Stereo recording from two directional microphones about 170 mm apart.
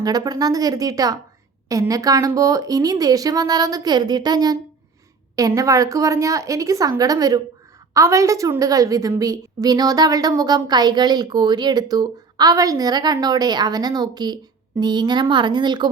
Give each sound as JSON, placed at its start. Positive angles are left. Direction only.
{"t": 0.0, "sound": "a woman's voice", "side_deg": -25}